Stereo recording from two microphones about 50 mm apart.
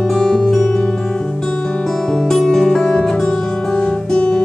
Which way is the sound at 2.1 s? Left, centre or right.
Centre.